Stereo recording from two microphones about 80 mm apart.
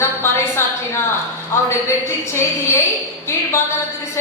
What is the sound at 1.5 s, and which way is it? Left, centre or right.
A woman's voice, left.